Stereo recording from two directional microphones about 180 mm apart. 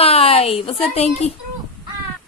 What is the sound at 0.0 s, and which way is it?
A woman's voice, 35° left (ahead or behind).